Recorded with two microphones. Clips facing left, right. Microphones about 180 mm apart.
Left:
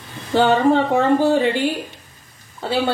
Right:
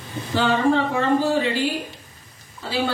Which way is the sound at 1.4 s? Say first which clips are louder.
Left 4 dB; 60° left (ahead or behind).